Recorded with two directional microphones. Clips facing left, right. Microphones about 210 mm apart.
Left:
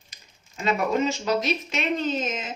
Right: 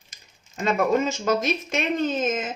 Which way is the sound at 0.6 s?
50° right (ahead or behind).